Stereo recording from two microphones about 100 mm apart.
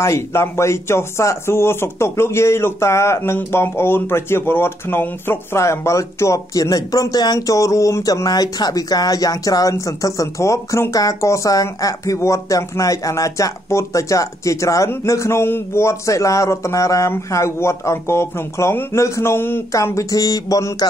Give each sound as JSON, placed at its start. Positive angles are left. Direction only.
{"t": 0.0, "sound": "speech", "side_deg": 25}